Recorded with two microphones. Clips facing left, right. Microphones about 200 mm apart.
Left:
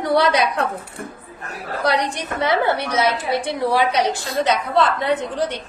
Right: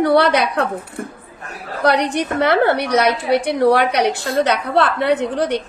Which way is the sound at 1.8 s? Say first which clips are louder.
Right 5 dB; 60° right (ahead or behind).